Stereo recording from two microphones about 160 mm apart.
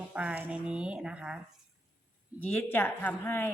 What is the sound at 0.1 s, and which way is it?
Speech, 10° right (ahead or behind).